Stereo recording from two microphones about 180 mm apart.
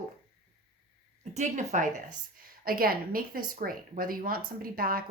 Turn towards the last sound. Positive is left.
turn(degrees=-55)  # may be behind; listen again after turning